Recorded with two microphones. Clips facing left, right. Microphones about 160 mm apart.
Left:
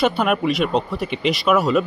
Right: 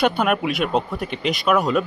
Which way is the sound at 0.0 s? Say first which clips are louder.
Left 1 dB; centre (ahead or behind).